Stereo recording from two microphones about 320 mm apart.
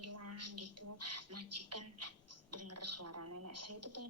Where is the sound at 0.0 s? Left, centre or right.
Right.